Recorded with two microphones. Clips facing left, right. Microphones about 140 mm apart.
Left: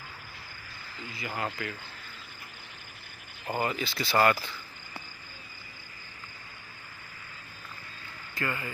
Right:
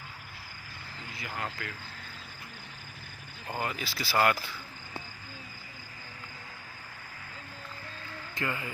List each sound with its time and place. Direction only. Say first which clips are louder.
1.1 s speech: left 3 dB; centre (ahead or behind)
3.4 s speech: left 4 dB; 5° left (ahead or behind)
8.4 s speech: left 1 dB; 20° right (ahead or behind)